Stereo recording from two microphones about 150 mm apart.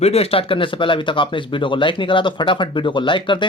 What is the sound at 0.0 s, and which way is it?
Speech, 40° left (ahead or behind).